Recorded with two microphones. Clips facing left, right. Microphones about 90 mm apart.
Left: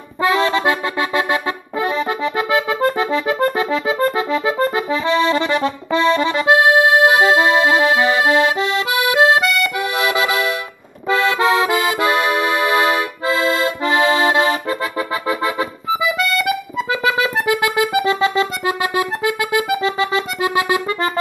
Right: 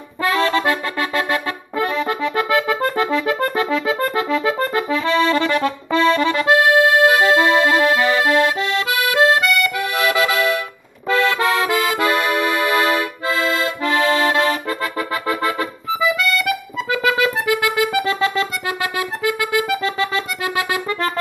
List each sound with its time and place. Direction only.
0.2 s music: 15° left (ahead or behind)
5.2 s accordion: 20° left (ahead or behind)
5.9 s music: 15° left (ahead or behind)
9.4 s accordion: 20° left (ahead or behind)
13.9 s accordion: 15° left (ahead or behind)
16.2 s music: 25° left (ahead or behind)